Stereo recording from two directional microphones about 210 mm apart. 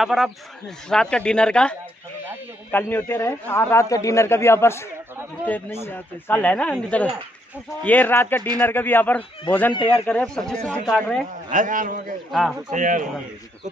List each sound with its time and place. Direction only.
0.0 s a man's voice: centre (ahead or behind)
9.8 s speech: 25° left (ahead or behind)
10.0 s speech: 5° left (ahead or behind)
11.5 s a man's voice: 40° right (ahead or behind)
12.3 s speech: centre (ahead or behind)
12.7 s a man's voice: 40° right (ahead or behind)